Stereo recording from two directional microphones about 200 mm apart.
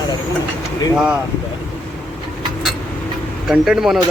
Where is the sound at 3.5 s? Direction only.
Centre (ahead or behind).